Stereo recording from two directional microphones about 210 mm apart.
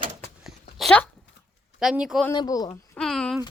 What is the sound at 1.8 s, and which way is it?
Speech, 5° right (ahead or behind).